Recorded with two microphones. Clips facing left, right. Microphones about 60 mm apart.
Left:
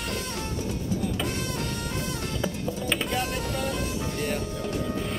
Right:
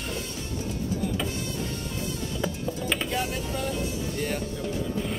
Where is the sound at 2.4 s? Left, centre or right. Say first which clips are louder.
Right 1 dB; centre.